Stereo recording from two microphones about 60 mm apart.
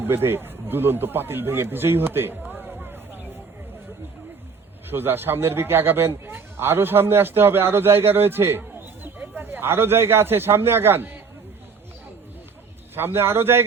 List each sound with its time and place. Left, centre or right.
0.0 s a man's voice: right
2.5 s a sound: right
4.9 s a man's voice: right
13.0 s a man's voice: right